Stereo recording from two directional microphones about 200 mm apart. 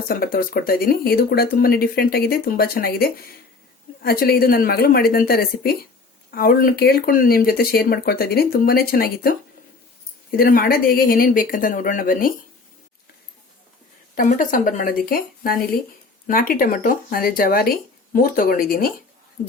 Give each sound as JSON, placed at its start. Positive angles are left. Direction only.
{"t": 0.1, "sound": "speech", "side_deg": 45}
{"t": 10.3, "sound": "speech", "side_deg": 45}
{"t": 14.2, "sound": "a woman's voice", "side_deg": 40}